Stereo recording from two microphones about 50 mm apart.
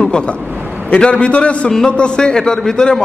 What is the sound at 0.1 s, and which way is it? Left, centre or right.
A man's voice, left.